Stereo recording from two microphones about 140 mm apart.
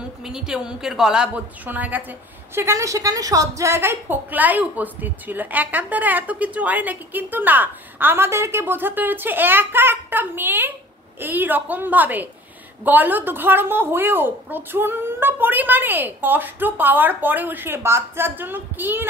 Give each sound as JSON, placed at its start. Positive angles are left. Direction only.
{"t": 0.2, "sound": "a woman's voice", "side_deg": -5}